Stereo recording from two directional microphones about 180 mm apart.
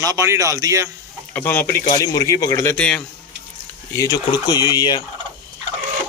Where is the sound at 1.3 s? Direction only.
10° left (ahead or behind).